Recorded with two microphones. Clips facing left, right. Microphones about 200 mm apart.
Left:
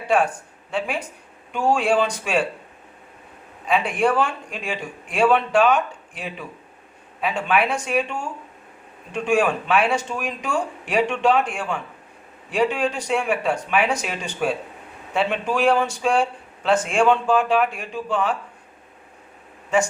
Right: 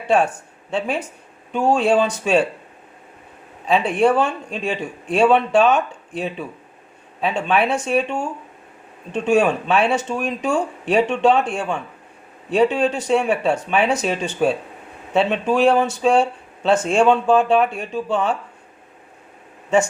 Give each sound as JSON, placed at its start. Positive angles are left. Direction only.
{"t": 0.7, "sound": "speech", "side_deg": -25}
{"t": 3.7, "sound": "speech", "side_deg": -25}
{"t": 9.2, "sound": "speech", "side_deg": -25}